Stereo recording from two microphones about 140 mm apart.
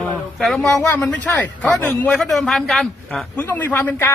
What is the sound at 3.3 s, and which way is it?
Speech, 15° left (ahead or behind).